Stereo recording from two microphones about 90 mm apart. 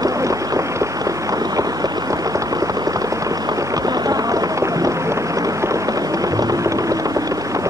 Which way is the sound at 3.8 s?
45° right (ahead or behind).